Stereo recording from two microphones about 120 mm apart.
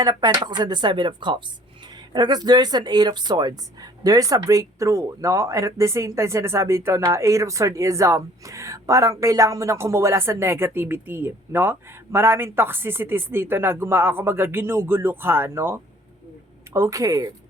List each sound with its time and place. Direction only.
0.0 s a woman's voice: 35° right (ahead or behind)